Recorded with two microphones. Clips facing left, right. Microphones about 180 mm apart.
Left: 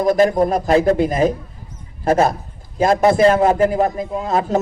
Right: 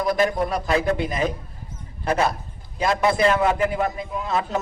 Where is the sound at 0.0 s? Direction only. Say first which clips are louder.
Left 7 dB; 45° left (ahead or behind).